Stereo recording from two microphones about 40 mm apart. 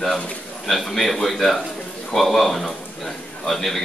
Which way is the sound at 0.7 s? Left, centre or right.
Centre.